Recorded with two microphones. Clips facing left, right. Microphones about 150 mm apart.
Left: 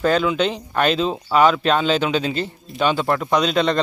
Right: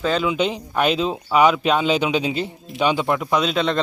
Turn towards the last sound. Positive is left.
turn(degrees=0)  # may be behind; listen again after turning